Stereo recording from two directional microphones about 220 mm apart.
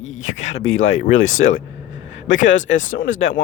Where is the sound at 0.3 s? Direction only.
30° left (ahead or behind).